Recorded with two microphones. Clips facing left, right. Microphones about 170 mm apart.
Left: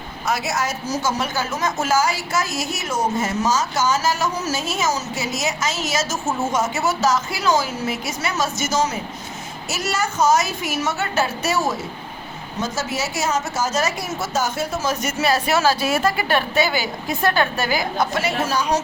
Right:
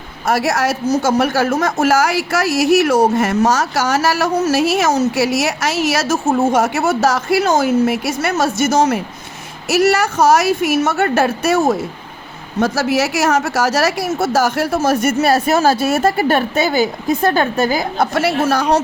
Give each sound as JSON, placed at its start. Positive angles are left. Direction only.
{"t": 0.3, "sound": "a woman's voice", "side_deg": -60}
{"t": 18.0, "sound": "speech", "side_deg": -60}